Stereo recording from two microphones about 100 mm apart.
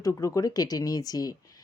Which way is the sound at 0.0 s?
35° left (ahead or behind).